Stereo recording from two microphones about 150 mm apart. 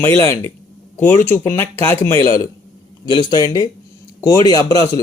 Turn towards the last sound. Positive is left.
turn(degrees=20)  # may be behind; listen again after turning